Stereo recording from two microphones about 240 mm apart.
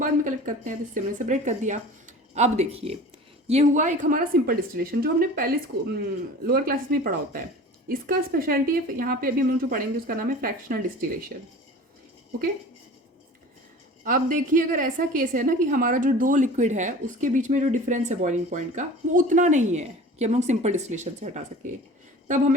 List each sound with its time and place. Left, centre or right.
0.0 s a woman's voice: right
5.7 s speech: right
6.4 s a woman's voice: right
14.0 s a woman's voice: right